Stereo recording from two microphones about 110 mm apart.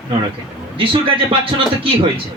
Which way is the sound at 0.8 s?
55° right (ahead or behind).